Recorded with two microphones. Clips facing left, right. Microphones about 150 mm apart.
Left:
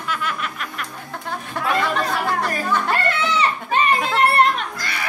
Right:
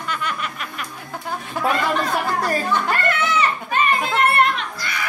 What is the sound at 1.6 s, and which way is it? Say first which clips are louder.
Chatter: right 3 dB; centre (ahead or behind).